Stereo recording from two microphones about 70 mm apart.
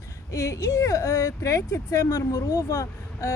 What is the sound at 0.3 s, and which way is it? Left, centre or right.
Speech, left.